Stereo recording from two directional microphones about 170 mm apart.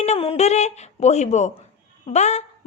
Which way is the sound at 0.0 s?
35° left (ahead or behind).